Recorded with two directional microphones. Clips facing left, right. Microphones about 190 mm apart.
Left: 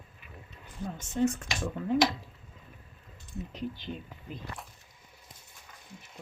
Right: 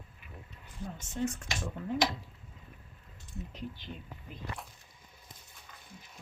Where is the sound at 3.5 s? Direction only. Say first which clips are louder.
Left 7 dB; 90° left.